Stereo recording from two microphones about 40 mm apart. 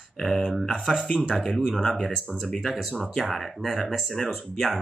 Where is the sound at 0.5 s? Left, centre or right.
Centre.